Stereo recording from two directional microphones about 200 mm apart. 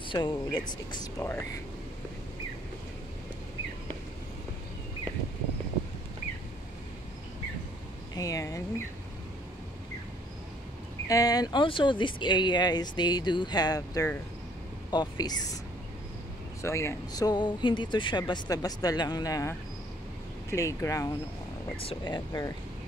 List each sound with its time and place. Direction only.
0.1 s speech: 20° left (ahead or behind)
8.2 s speech: 15° left (ahead or behind)
11.1 s speech: 20° left (ahead or behind)
16.6 s speech: 15° left (ahead or behind)